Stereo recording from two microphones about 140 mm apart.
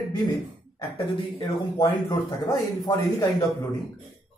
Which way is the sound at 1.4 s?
30° left (ahead or behind).